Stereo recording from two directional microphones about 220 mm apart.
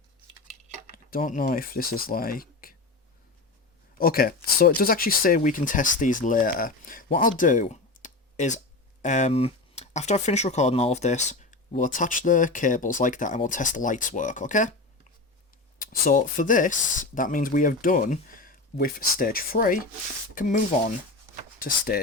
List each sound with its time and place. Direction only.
0.9 s speech: 40° left (ahead or behind)
3.9 s speech: 40° left (ahead or behind)
15.8 s speech: 40° left (ahead or behind)
21.6 s speech: 40° left (ahead or behind)